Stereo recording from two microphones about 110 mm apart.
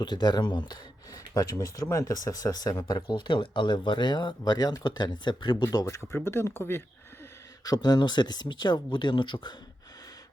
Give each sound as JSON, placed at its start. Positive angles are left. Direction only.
{"t": 0.0, "sound": "speech", "side_deg": 40}
{"t": 5.6, "sound": "speech", "side_deg": 30}
{"t": 7.6, "sound": "speech", "side_deg": 35}